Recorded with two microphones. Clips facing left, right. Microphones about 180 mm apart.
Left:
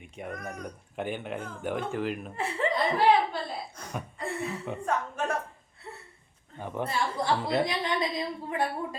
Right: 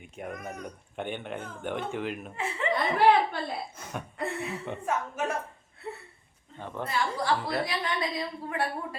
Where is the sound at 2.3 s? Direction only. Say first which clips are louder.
Left 2 dB; 35° left (ahead or behind).